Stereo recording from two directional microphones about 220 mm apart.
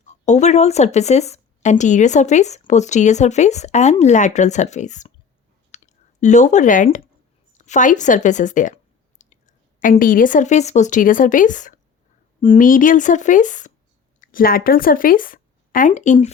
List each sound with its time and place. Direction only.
0.3 s speech: 30° left (ahead or behind)
5.7 s clicking: 35° left (ahead or behind)
7.6 s speech: 35° left (ahead or behind)